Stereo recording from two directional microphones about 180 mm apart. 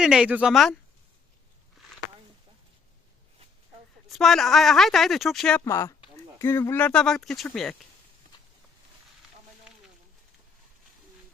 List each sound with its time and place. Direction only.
0.0 s a woman's voice: 5° right (ahead or behind)
4.1 s a woman's voice: centre (ahead or behind)
5.6 s a woman's voice: 15° left (ahead or behind)